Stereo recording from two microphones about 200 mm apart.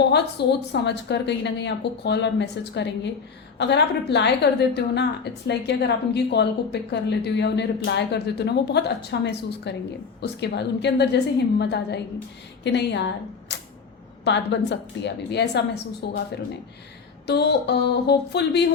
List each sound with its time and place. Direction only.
0.1 s a woman's voice: 60° left (ahead or behind)